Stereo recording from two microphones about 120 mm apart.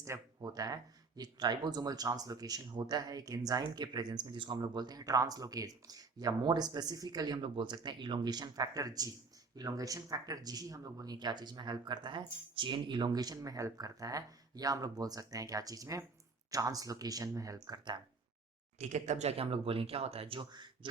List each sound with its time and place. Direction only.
0.0 s speech: 30° right (ahead or behind)
18.8 s speech: 80° right; by 20.7 s 40° right (ahead or behind)